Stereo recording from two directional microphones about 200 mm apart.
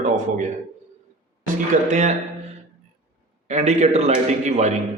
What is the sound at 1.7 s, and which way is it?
Speech, 40° right (ahead or behind).